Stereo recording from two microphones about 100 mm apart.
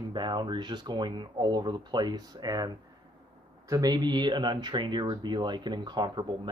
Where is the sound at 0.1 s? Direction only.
50° right (ahead or behind).